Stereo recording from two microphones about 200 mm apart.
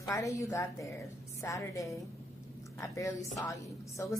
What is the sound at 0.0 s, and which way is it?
A woman's voice, 15° left (ahead or behind).